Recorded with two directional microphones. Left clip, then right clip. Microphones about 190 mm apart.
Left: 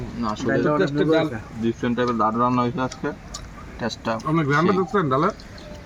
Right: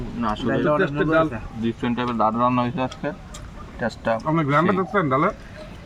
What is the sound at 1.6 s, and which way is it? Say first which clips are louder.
Speech: left 2 dB; 20° right (ahead or behind).